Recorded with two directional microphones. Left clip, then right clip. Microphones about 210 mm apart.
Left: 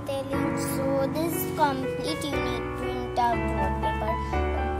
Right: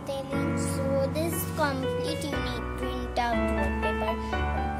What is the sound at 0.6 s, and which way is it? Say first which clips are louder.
Music: even; centre (ahead or behind).